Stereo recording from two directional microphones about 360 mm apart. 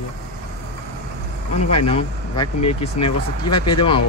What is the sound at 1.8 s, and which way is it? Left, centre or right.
Speech, centre.